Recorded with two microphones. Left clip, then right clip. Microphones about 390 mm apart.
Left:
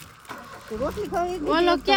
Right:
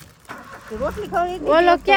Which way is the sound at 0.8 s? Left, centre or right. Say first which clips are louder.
Right 4 dB; left.